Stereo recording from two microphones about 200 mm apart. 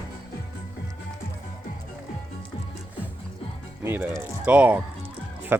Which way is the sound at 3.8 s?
10° right (ahead or behind).